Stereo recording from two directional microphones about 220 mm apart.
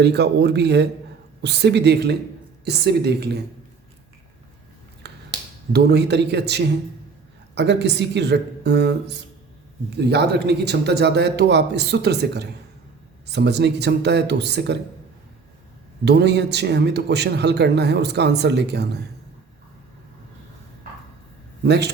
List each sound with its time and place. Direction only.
0.0 s speech: 50° right (ahead or behind)
5.0 s finger snapping: 50° right (ahead or behind)
5.7 s speech: 50° right (ahead or behind)
16.0 s speech: 50° right (ahead or behind)
21.6 s speech: 50° right (ahead or behind)